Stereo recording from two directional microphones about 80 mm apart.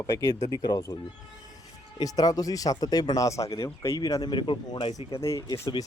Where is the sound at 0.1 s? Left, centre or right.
Left.